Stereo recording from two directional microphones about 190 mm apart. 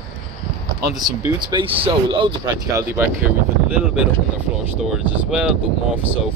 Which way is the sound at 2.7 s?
10° right (ahead or behind).